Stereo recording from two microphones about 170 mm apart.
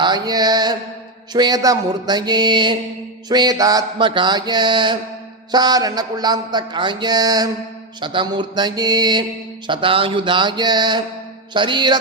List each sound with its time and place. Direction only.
0.0 s music: 25° right (ahead or behind)
1.3 s speech: 25° right (ahead or behind)